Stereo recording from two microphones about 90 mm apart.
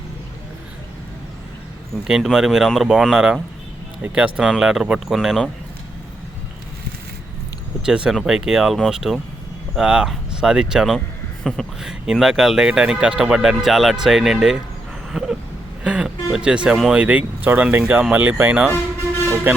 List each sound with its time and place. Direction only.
2.0 s speech: 5° right (ahead or behind)
7.9 s speech: 10° right (ahead or behind)
15.1 s a sound: 5° right (ahead or behind)
15.8 s speech: 10° right (ahead or behind)
17.0 s speech: 15° right (ahead or behind)